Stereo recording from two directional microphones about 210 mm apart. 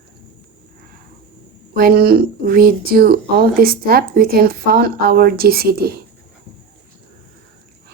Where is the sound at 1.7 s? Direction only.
45° right (ahead or behind).